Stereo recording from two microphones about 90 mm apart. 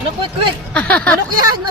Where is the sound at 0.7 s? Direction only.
15° left (ahead or behind).